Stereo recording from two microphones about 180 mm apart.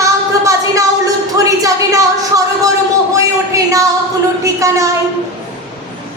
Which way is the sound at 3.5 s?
20° right (ahead or behind).